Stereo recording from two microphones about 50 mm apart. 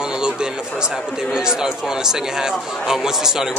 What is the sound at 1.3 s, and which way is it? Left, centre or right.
A man's voice, centre.